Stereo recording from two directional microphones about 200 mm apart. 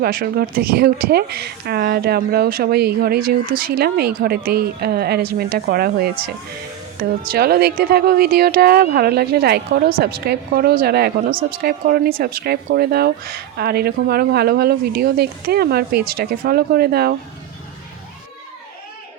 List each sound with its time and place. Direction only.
0.0 s speech: 50° right (ahead or behind)